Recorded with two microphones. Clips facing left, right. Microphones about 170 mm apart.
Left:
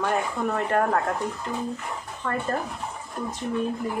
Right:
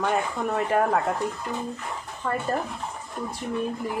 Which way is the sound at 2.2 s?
10° right (ahead or behind).